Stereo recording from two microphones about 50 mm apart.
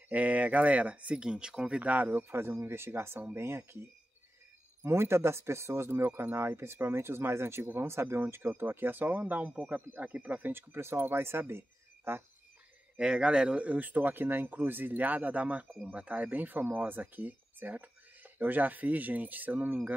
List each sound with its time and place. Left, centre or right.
0.1 s speech: right
1.8 s speech: right
4.8 s speech: right
12.9 s speech: centre